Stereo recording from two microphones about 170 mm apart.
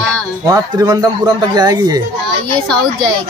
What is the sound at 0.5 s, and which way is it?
Speech, 20° right (ahead or behind).